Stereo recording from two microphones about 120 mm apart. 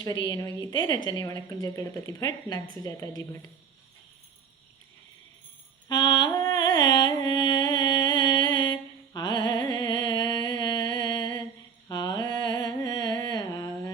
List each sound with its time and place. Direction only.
0.0 s a woman's voice: 30° left (ahead or behind)
5.9 s music: 35° left (ahead or behind)
11.9 s a sound: 35° left (ahead or behind)